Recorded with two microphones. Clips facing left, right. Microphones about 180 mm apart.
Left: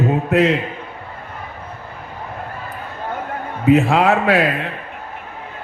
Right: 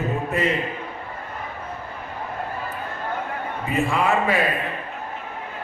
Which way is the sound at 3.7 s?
70° left (ahead or behind).